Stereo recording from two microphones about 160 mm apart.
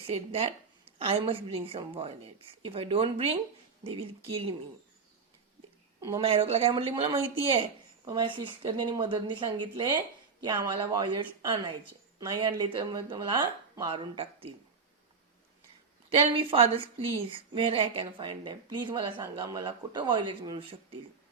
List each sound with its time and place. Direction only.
0.1 s a woman's voice: 40° right (ahead or behind)
6.1 s a woman's voice: 30° right (ahead or behind)
16.0 s a woman's voice: 35° right (ahead or behind)